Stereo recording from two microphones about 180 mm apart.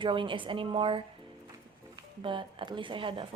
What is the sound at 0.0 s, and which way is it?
A woman's voice, 30° right (ahead or behind).